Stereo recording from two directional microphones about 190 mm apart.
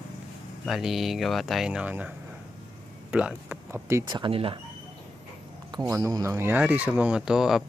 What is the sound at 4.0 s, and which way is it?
Speech, 25° right (ahead or behind).